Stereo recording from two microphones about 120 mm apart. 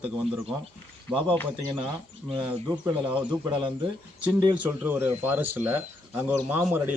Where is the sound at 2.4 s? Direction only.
10° right (ahead or behind).